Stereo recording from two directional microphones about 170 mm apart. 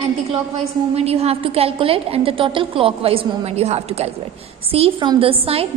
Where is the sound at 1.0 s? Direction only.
35° right (ahead or behind).